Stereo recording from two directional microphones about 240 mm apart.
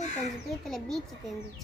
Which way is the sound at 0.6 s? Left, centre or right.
Centre.